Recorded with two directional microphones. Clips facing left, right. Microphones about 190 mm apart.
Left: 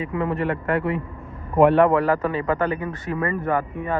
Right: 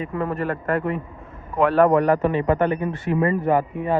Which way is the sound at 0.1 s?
25° left (ahead or behind).